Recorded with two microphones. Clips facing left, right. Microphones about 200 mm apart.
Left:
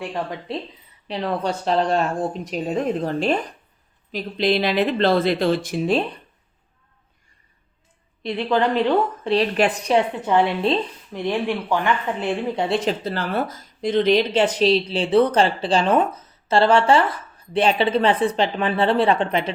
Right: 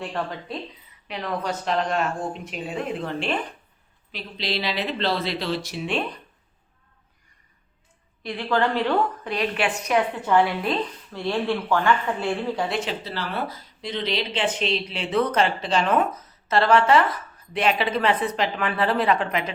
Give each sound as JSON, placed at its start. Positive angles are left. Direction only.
{"t": 0.1, "sound": "a woman's voice", "side_deg": 20}
{"t": 1.0, "sound": "speech", "side_deg": 30}
{"t": 8.2, "sound": "a woman's voice", "side_deg": 20}
{"t": 9.3, "sound": "speech", "side_deg": 35}
{"t": 10.2, "sound": "a woman's voice", "side_deg": 20}
{"t": 13.1, "sound": "speech", "side_deg": 50}